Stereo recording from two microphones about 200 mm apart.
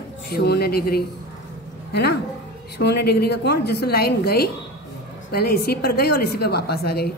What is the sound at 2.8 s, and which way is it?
A woman's voice, 55° left (ahead or behind).